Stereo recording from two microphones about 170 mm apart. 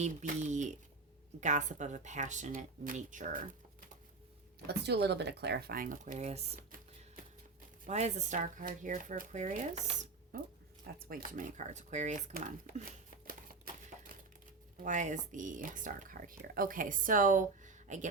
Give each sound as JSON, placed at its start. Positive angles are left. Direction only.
{"t": 0.0, "sound": "speech", "side_deg": -45}
{"t": 4.6, "sound": "speech", "side_deg": -80}
{"t": 7.9, "sound": "speech", "side_deg": -40}
{"t": 10.3, "sound": "speech", "side_deg": -55}
{"t": 14.8, "sound": "speech", "side_deg": -45}